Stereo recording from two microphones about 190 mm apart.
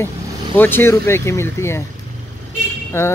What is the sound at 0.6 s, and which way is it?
Speech, 10° left (ahead or behind).